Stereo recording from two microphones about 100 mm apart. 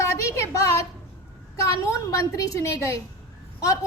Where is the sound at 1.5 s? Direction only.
30° left (ahead or behind).